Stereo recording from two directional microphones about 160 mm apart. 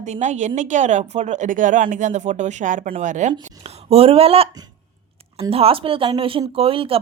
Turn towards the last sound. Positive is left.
turn(degrees=-35)  # may be behind; listen again after turning